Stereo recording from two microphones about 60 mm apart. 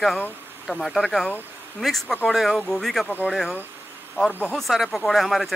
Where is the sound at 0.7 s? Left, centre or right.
Centre.